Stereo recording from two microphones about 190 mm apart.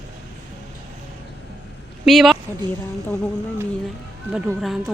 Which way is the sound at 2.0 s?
Centre (ahead or behind).